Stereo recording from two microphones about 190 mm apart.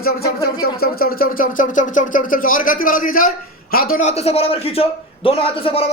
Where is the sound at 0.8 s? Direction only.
50° left (ahead or behind).